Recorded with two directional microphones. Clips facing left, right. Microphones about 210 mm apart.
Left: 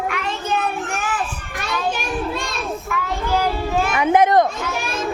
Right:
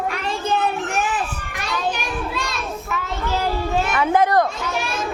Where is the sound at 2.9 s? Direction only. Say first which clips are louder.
Even; 25° right (ahead or behind).